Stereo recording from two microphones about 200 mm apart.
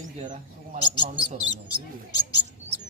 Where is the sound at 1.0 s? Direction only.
20° left (ahead or behind).